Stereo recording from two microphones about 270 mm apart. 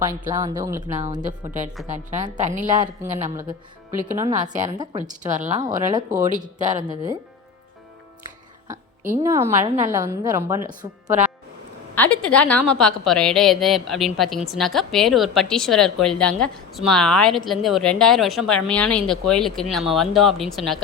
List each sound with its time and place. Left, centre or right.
0.0 s a woman's voice: centre
0.9 s a woman's voice: right
4.9 s a woman's voice: right
5.9 s a woman's voice: centre
6.3 s a woman's voice: right
8.6 s a woman's voice: centre
11.9 s a woman's voice: centre